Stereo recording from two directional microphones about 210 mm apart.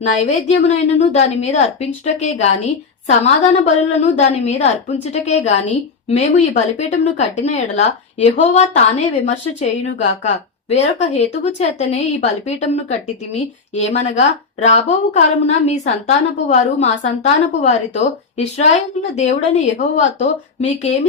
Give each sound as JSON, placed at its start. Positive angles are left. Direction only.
{"t": 0.0, "sound": "speech", "side_deg": 35}